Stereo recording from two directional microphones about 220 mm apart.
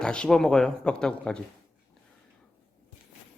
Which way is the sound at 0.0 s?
5° left (ahead or behind).